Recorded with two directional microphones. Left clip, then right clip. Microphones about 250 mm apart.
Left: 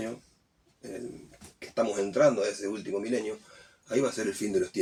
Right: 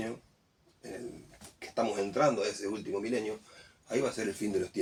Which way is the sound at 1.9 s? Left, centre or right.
Centre.